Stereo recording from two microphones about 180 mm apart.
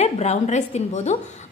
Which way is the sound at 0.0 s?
40° left (ahead or behind).